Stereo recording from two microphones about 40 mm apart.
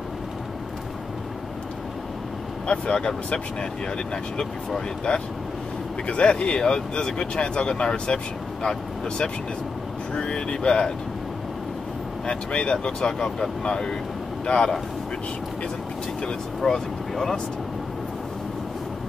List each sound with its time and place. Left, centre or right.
2.6 s speech: left
4.1 s speech: centre
10.1 s speech: left
12.3 s speech: left
16.6 s speech: centre